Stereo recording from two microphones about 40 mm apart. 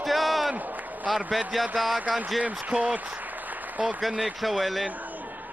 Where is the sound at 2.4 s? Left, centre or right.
Right.